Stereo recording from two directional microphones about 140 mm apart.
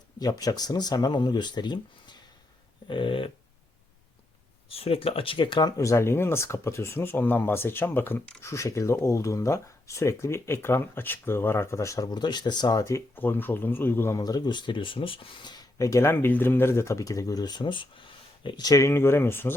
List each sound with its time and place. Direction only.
0.2 s speech: 25° left (ahead or behind)
2.8 s dog: 35° left (ahead or behind)
4.7 s speech: 45° left (ahead or behind); by 19.5 s 15° left (ahead or behind)